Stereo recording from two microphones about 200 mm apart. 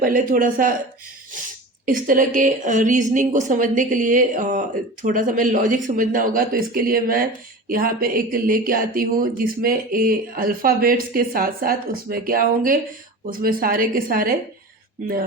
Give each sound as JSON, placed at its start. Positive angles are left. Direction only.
{"t": 0.0, "sound": "speech", "side_deg": -45}
{"t": 1.9, "sound": "a woman's voice", "side_deg": -40}